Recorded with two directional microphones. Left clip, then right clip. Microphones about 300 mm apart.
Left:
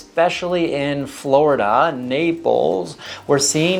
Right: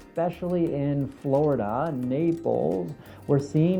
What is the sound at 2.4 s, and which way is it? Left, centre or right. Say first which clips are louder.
Speech: left 9 dB; left.